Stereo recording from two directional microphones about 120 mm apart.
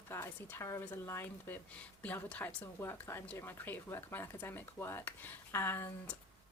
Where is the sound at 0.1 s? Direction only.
20° left (ahead or behind).